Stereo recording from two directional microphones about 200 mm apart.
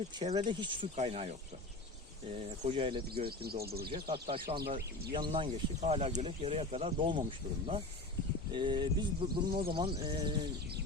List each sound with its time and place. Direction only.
0.2 s speech: 30° right (ahead or behind)
2.6 s speech: 25° right (ahead or behind)
3.2 s speech: 50° right (ahead or behind)
4.1 s speech: 30° right (ahead or behind)
4.6 s speech: 50° right (ahead or behind)
5.1 s speech: 25° right (ahead or behind)